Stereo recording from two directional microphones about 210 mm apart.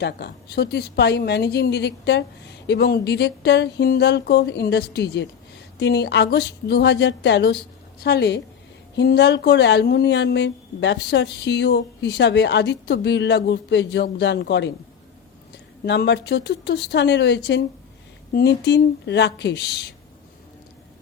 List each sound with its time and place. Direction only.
0.0 s speech: 50° left (ahead or behind)
15.9 s speech: 55° left (ahead or behind)